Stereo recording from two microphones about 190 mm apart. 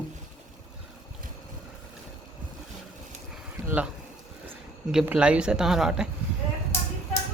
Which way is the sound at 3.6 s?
5° right (ahead or behind).